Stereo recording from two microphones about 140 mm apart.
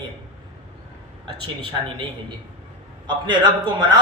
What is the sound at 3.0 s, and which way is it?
Speech, 30° right (ahead or behind).